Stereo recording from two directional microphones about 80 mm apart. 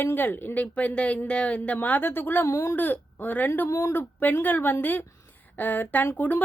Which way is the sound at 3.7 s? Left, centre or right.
Left.